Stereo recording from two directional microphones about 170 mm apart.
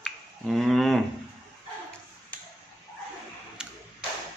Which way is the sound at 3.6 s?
5° right (ahead or behind).